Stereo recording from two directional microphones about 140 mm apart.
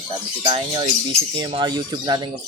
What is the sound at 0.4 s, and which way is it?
Speech, 40° right (ahead or behind).